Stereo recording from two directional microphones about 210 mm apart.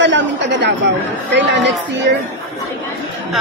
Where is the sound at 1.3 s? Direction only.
55° right (ahead or behind).